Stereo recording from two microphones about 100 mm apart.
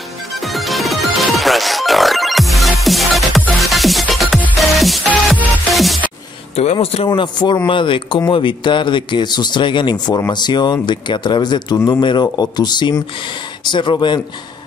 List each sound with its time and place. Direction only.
0.3 s music: centre (ahead or behind)
6.5 s speech: 90° left
7.2 s a man's voice: 50° left (ahead or behind)